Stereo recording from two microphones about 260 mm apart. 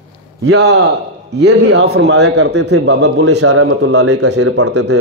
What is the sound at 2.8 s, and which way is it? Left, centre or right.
Speech, right.